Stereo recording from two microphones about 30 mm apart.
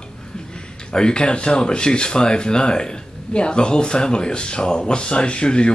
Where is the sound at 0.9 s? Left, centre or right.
Left.